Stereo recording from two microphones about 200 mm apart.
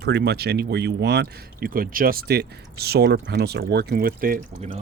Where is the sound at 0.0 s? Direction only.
60° right (ahead or behind).